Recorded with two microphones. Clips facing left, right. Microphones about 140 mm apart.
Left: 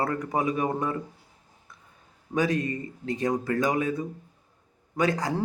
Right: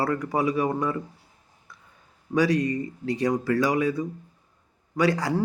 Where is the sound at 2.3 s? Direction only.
25° left (ahead or behind).